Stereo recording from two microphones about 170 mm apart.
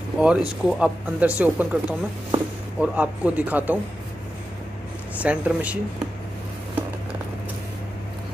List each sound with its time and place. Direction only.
0.2 s speech: 5° right (ahead or behind)
5.2 s speech: 10° right (ahead or behind)